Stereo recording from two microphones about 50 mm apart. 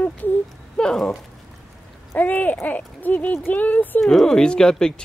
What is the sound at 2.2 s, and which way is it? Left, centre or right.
Speech, left.